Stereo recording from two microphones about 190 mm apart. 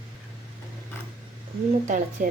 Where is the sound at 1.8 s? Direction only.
40° right (ahead or behind).